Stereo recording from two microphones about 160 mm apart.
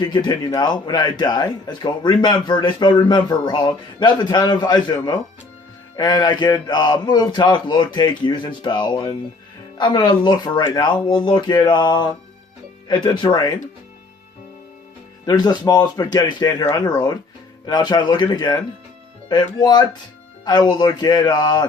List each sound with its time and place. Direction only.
0.0 s speech: 25° left (ahead or behind)
6.0 s speech: 25° left (ahead or behind)
15.3 s speech: 25° left (ahead or behind)